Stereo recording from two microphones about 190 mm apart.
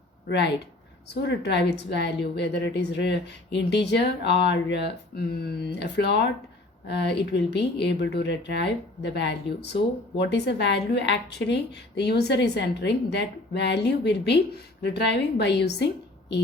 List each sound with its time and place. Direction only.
0.3 s a woman's voice: 65° left (ahead or behind)